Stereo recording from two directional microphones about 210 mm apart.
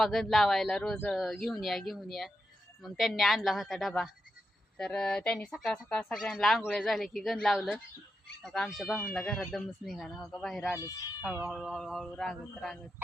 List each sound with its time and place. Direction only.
0.0 s speech: centre (ahead or behind)
10.7 s speech: 15° left (ahead or behind)
11.2 s speech: centre (ahead or behind)